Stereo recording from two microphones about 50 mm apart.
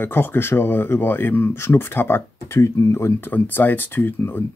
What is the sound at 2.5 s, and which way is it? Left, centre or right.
Speech, left.